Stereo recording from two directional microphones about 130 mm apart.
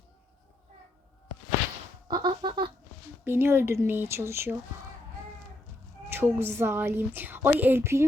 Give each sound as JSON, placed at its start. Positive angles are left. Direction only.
{"t": 2.0, "sound": "a sound", "side_deg": -35}
{"t": 3.2, "sound": "a woman's voice", "side_deg": -15}
{"t": 6.1, "sound": "a woman's voice", "side_deg": -20}